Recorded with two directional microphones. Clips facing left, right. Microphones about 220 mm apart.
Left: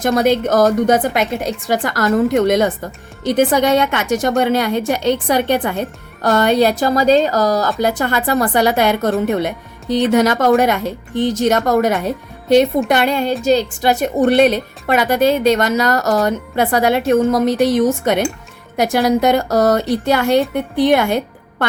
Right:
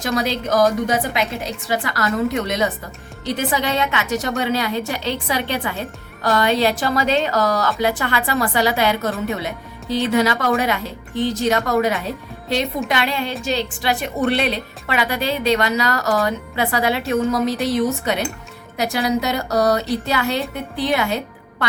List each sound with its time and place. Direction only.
0.0 s a woman's voice: 50° left (ahead or behind)